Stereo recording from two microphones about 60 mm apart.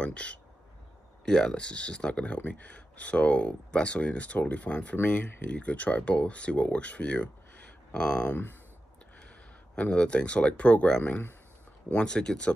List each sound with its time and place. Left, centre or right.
0.0 s speech: centre
9.8 s speech: centre